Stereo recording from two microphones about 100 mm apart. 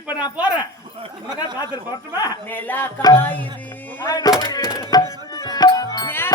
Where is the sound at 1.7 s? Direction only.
40° left (ahead or behind).